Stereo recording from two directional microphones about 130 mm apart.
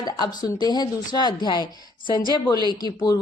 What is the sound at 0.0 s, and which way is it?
A woman's voice, 30° left (ahead or behind).